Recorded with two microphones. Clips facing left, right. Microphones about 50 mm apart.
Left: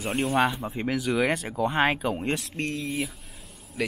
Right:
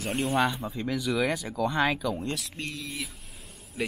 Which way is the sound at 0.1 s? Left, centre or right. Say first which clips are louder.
Left 2 dB; centre.